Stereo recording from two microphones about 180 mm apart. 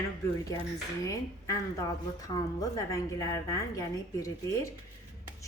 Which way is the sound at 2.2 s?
20° left (ahead or behind).